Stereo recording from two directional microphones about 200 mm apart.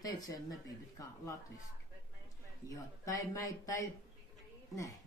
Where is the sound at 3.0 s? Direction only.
15° left (ahead or behind).